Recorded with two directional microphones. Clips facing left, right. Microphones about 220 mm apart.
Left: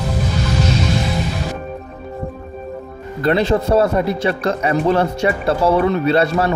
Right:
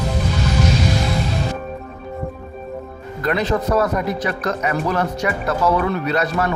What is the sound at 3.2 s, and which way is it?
Speech, 30° left (ahead or behind).